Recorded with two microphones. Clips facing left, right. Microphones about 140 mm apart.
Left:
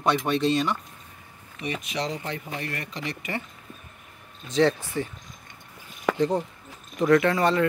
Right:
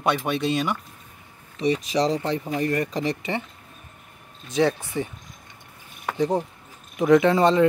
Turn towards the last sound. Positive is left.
turn(degrees=-20)  # may be behind; listen again after turning